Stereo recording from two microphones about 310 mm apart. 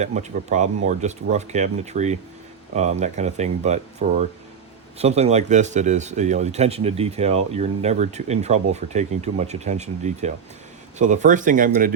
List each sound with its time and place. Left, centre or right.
0.0 s speech: right